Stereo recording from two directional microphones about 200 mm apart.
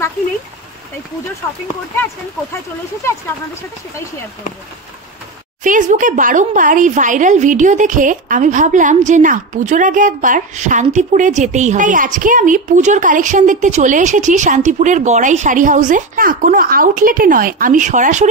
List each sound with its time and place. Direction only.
5.6 s speech: 40° right (ahead or behind)